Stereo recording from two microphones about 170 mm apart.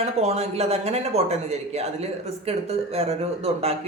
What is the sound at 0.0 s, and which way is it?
A woman's voice, 40° right (ahead or behind).